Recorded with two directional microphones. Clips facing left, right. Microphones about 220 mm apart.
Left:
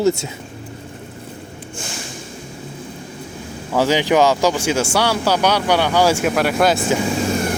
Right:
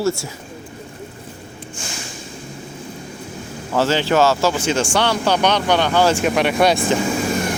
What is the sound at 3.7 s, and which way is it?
Speech, 15° left (ahead or behind).